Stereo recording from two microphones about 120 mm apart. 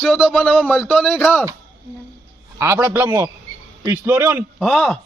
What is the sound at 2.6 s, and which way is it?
A man's voice, 20° right (ahead or behind).